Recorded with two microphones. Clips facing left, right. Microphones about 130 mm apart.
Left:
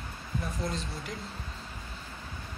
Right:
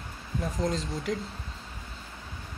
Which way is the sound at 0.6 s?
90° right.